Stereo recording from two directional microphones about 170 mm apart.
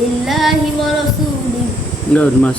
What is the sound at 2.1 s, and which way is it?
Speech, 5° left (ahead or behind).